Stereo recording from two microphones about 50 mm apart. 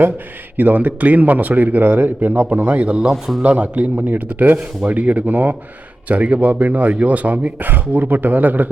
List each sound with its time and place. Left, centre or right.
0.5 s a man's voice: right
3.1 s a man's voice: centre
3.4 s a man's voice: right